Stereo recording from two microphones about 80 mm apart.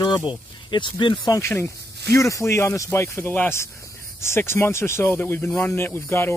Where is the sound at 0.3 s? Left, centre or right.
Left.